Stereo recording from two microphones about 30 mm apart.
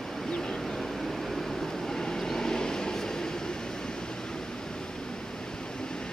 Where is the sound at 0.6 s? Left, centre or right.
Centre.